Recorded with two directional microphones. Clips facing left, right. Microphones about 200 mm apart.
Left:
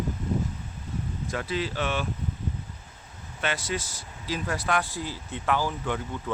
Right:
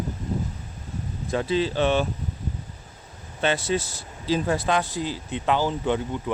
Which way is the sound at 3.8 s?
60° right (ahead or behind).